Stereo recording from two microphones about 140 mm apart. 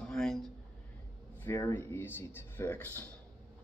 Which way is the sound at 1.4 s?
15° left (ahead or behind).